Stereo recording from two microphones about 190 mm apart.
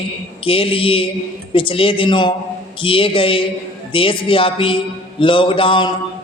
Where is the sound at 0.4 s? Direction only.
30° left (ahead or behind).